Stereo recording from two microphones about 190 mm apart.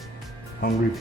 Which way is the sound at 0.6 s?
50° left (ahead or behind).